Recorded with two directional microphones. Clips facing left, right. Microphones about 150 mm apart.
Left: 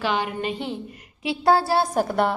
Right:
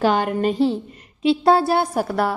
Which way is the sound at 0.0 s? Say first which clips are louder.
Right 6 dB; 45° right (ahead or behind).